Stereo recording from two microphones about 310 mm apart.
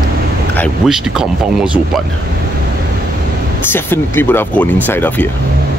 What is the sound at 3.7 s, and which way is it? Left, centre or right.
Speech, centre.